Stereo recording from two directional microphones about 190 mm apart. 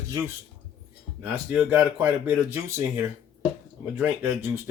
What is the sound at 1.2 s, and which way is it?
Speech, 10° right (ahead or behind).